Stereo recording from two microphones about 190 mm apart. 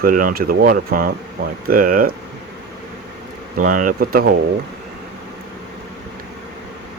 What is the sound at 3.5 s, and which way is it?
Speech, 45° right (ahead or behind).